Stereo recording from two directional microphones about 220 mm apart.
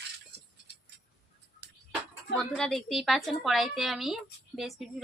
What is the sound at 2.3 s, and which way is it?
A woman's voice, centre (ahead or behind).